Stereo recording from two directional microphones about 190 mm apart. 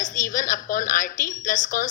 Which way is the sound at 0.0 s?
45° left (ahead or behind).